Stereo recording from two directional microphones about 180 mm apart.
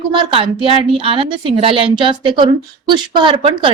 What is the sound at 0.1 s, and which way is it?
A woman's voice, 30° right (ahead or behind).